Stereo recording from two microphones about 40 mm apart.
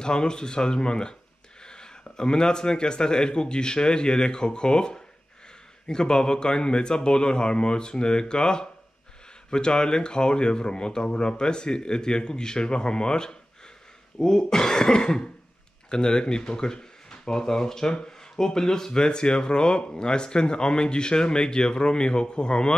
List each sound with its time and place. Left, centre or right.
0.0 s speech: left